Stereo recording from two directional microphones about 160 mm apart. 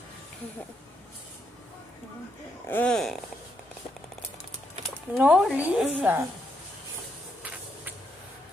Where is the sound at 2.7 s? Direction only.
10° left (ahead or behind).